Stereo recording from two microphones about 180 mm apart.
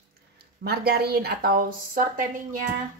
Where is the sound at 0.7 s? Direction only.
60° right (ahead or behind).